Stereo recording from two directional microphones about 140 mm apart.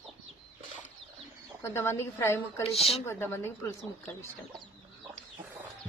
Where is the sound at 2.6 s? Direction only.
45° left (ahead or behind).